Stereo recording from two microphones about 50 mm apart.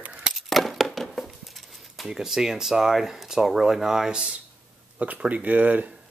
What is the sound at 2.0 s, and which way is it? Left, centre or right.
Speech, centre.